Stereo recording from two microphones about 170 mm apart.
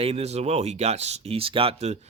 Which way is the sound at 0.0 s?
35° right (ahead or behind).